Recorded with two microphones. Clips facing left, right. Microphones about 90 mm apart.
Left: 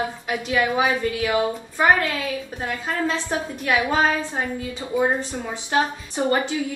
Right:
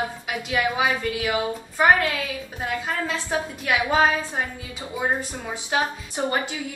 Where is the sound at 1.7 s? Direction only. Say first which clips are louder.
Right 1 dB; 15° right (ahead or behind).